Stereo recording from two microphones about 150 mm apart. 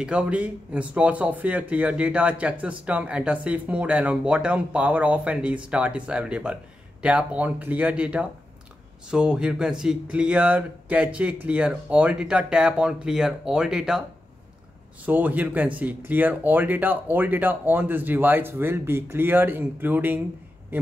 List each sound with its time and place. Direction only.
0.0 s speech: 5° right (ahead or behind)
15.0 s speech: 10° right (ahead or behind)